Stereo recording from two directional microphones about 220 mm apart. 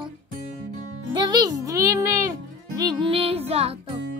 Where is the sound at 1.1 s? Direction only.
20° right (ahead or behind).